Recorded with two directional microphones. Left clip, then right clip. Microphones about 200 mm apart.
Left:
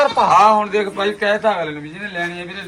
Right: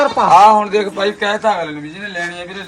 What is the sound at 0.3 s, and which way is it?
A man's voice, 30° right (ahead or behind).